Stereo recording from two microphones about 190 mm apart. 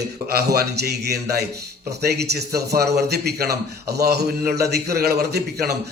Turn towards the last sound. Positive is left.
turn(degrees=-55)  # may be behind; listen again after turning